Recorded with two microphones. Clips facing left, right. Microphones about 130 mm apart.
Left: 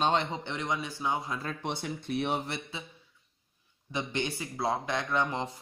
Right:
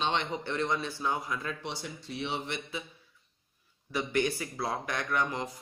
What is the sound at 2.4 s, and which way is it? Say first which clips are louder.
Speech: right 1 dB; 35° left (ahead or behind).